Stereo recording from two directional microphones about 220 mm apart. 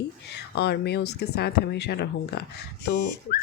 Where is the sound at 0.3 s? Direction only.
50° left (ahead or behind).